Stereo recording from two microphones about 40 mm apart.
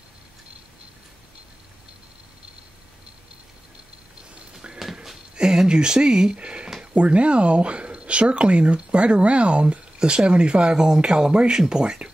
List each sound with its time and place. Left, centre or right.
5.3 s speech: centre